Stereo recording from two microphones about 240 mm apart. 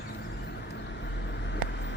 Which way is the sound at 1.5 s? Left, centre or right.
Left.